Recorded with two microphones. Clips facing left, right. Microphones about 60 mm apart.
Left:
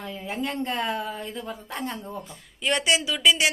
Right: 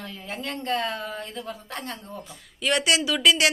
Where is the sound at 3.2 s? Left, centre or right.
Centre.